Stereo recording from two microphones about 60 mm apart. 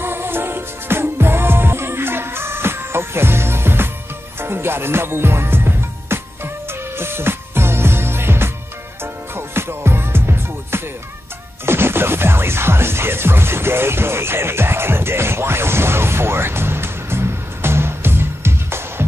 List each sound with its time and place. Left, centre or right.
0.0 s music: right